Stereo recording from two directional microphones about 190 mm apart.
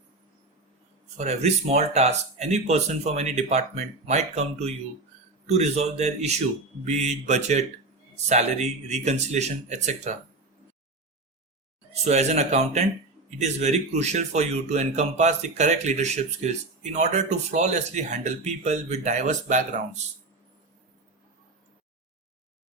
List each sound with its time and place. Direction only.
1.1 s speech: 35° right (ahead or behind)
12.0 s speech: 35° right (ahead or behind)